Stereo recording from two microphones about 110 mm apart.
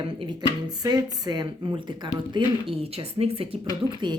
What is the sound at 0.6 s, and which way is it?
Speech, 35° right (ahead or behind).